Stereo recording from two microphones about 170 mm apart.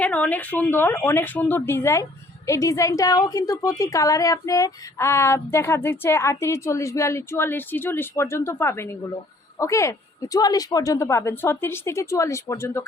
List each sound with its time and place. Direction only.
0.0 s a woman's voice: 10° left (ahead or behind)